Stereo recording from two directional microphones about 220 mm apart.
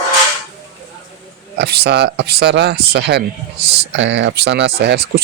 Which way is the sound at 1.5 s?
45° right (ahead or behind).